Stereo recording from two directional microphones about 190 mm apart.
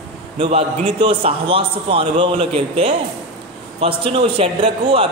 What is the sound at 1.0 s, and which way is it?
A man's voice, 25° right (ahead or behind).